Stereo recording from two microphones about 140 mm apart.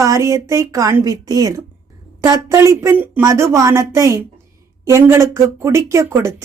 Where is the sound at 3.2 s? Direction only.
25° right (ahead or behind).